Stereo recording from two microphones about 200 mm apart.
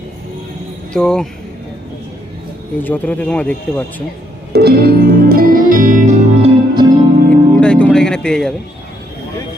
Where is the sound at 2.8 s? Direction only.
10° left (ahead or behind).